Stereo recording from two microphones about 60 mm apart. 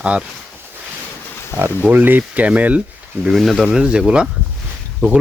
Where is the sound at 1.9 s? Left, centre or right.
Right.